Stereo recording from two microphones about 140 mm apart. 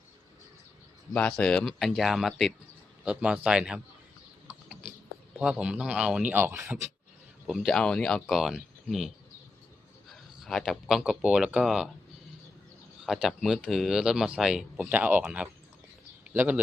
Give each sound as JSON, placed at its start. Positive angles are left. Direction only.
{"t": 1.1, "sound": "speech", "side_deg": 5}
{"t": 5.4, "sound": "speech", "side_deg": -5}
{"t": 7.4, "sound": "speech", "side_deg": 0}
{"t": 10.1, "sound": "a sound", "side_deg": 0}
{"t": 10.7, "sound": "speech", "side_deg": 0}
{"t": 13.0, "sound": "speech", "side_deg": -5}
{"t": 16.2, "sound": "a sound", "side_deg": -10}